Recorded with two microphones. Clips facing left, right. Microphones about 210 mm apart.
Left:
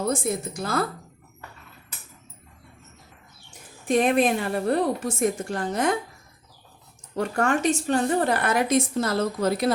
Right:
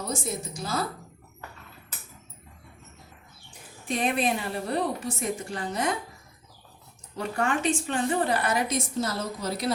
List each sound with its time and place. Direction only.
0.0 s a woman's voice: 55° left (ahead or behind)
3.8 s a woman's voice: 50° left (ahead or behind)
7.2 s a woman's voice: 45° left (ahead or behind)